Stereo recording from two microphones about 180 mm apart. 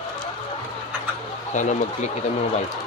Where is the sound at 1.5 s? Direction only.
40° left (ahead or behind).